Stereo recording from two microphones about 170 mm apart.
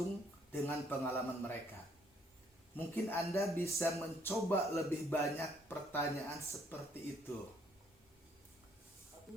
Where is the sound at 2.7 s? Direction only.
10° left (ahead or behind).